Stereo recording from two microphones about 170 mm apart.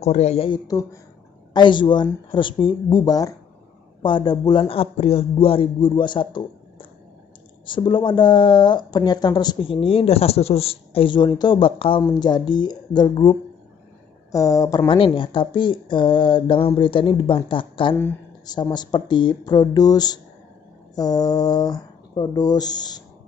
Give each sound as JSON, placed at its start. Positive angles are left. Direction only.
{"t": 0.0, "sound": "speech", "side_deg": 40}